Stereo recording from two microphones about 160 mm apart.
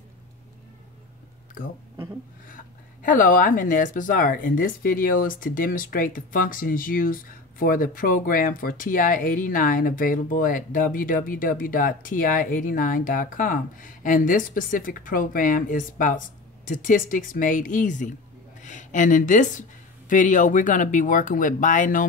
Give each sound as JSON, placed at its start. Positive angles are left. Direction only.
{"t": 1.6, "sound": "speech", "side_deg": 60}